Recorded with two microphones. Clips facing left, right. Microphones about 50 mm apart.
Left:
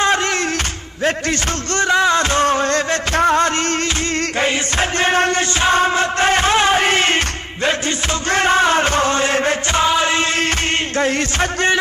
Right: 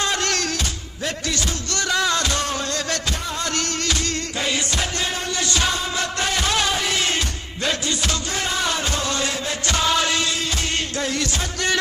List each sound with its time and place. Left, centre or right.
0.0 s music: left
1.0 s a man's voice: left
1.9 s music: left
4.4 s music: left
5.5 s music: left
8.3 s chant: left
11.0 s music: left